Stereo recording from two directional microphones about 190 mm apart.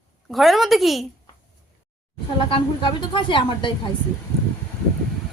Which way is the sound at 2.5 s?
25° left (ahead or behind).